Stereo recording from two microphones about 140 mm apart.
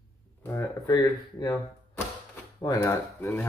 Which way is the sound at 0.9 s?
25° left (ahead or behind).